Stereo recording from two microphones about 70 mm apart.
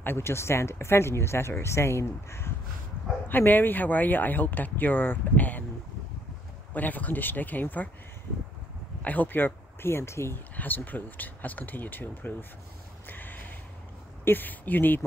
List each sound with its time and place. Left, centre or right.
0.0 s speech: left
3.3 s speech: left
6.7 s speech: left
9.0 s speech: left
10.5 s speech: left
13.0 s a sound: left
14.2 s speech: left